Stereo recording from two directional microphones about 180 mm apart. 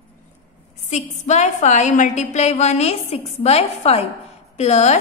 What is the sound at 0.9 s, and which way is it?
A woman's voice, 40° left (ahead or behind).